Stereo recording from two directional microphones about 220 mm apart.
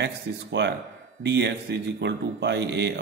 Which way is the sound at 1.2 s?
50° right (ahead or behind).